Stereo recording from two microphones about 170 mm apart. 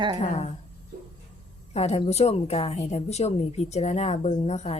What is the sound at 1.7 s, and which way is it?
A woman's voice, 40° left (ahead or behind).